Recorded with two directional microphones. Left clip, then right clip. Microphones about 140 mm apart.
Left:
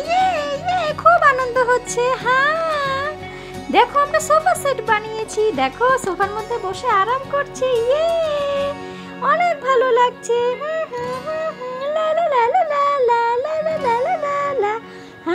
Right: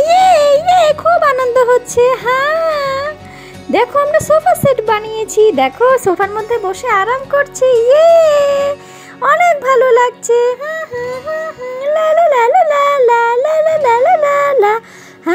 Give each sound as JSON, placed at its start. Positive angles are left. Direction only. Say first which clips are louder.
{"t": 0.0, "sound": "a sound", "louder": "right 10 dB", "side_deg": -40}
{"t": 0.7, "sound": "music", "louder": "right 11 dB", "side_deg": -40}
{"t": 1.0, "sound": "music", "louder": "right 3 dB", "side_deg": -30}
{"t": 7.2, "sound": "music", "louder": "right 8 dB", "side_deg": -30}
{"t": 7.9, "sound": "music", "louder": "right 11 dB", "side_deg": -40}
{"t": 10.6, "sound": "music", "louder": "right 3 dB", "side_deg": -10}
{"t": 11.8, "sound": "a sound", "louder": "right 8 dB", "side_deg": -20}
{"t": 13.8, "sound": "music", "louder": "right 8 dB", "side_deg": -30}